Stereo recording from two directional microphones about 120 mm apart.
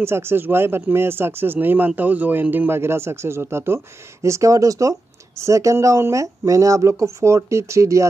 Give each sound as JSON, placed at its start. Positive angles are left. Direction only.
{"t": 0.0, "sound": "speech", "side_deg": -20}